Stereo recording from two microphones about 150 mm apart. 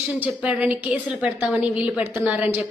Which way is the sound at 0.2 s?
10° right (ahead or behind).